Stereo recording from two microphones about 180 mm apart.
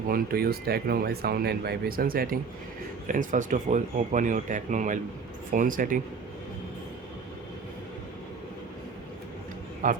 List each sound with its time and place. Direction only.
0.1 s speech: 55° right (ahead or behind)
9.8 s speech: 50° right (ahead or behind)